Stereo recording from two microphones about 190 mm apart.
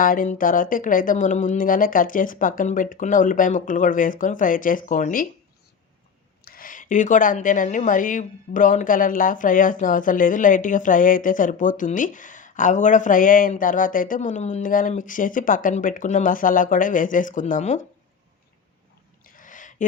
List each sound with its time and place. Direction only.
0.0 s speech: 45° left (ahead or behind)
6.4 s speech: 50° left (ahead or behind)
19.2 s a sound: 45° left (ahead or behind)